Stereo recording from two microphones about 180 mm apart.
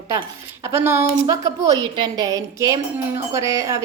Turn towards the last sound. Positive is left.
turn(degrees=-15)  # may be behind; listen again after turning